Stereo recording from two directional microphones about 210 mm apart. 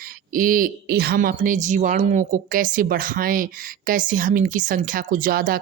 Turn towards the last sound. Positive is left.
turn(degrees=-45)  # may be behind; listen again after turning